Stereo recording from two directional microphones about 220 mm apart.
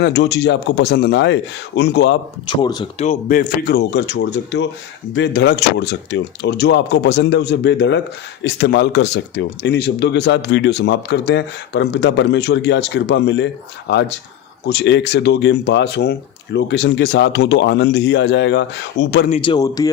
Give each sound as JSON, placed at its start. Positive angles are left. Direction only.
{"t": 0.0, "sound": "speech", "side_deg": 50}
{"t": 2.5, "sound": "speech", "side_deg": 20}
{"t": 3.0, "sound": "speech", "side_deg": 35}
{"t": 19.3, "sound": "a man's voice", "side_deg": 20}